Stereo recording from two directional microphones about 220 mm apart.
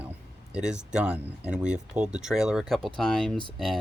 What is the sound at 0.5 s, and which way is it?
Speech, 5° right (ahead or behind).